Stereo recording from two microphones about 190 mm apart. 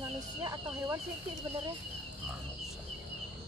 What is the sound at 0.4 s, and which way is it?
Speech, 15° right (ahead or behind).